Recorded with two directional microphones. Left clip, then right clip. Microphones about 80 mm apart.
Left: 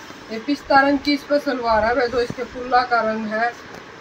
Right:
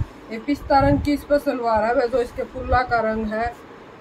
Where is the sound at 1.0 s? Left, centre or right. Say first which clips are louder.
Even; right.